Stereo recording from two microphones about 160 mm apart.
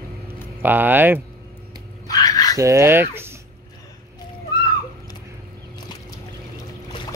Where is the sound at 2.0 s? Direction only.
20° left (ahead or behind).